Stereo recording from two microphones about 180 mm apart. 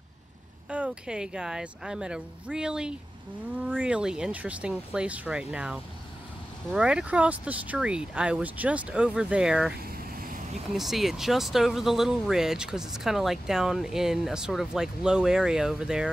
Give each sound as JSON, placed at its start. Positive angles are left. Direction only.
{"t": 0.7, "sound": "speech", "side_deg": -5}
{"t": 9.8, "sound": "vehicle", "side_deg": -55}
{"t": 10.7, "sound": "speech", "side_deg": 0}